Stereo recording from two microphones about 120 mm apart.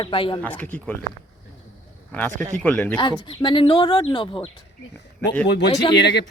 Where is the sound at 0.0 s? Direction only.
45° left (ahead or behind).